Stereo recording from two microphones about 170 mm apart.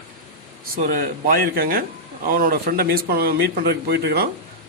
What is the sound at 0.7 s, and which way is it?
Speech, 55° right (ahead or behind).